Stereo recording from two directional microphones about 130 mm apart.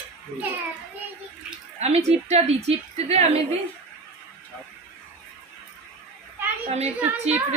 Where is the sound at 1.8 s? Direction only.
55° right (ahead or behind).